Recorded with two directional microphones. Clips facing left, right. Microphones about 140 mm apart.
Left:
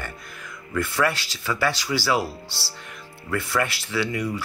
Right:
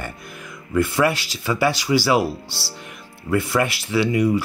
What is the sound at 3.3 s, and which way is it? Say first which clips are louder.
Speech: right 5 dB; 15° right (ahead or behind).